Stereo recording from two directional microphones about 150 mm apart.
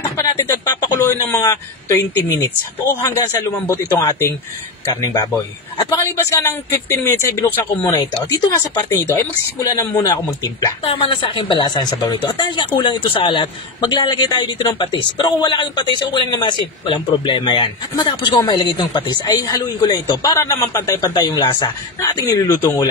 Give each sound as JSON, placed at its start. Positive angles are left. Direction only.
{"t": 0.0, "sound": "a sound", "side_deg": 20}
{"t": 1.1, "sound": "speech", "side_deg": 20}
{"t": 10.9, "sound": "speech", "side_deg": 40}